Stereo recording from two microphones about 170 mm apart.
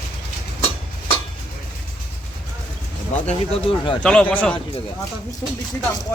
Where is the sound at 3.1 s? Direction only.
40° left (ahead or behind).